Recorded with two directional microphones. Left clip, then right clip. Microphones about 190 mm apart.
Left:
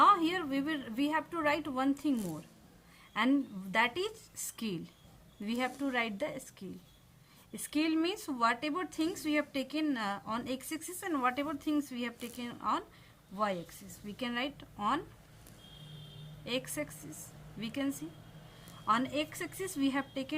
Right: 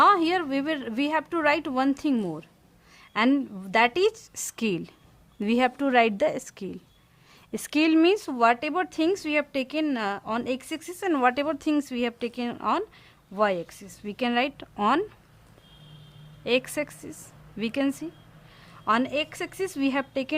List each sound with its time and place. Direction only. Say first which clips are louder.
0.0 s speech: right 6 dB; 60° right (ahead or behind)
16.4 s speech: right 12 dB; 55° right (ahead or behind)